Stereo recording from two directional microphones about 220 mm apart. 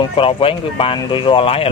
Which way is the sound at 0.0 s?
25° left (ahead or behind).